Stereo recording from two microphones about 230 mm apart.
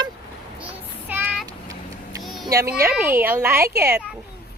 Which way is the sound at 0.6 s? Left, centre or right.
Centre.